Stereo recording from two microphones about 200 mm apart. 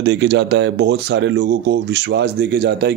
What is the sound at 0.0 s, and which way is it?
Speech, 60° right (ahead or behind).